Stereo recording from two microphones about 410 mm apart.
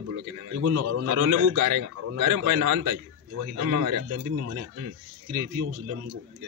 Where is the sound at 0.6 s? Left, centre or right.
Right.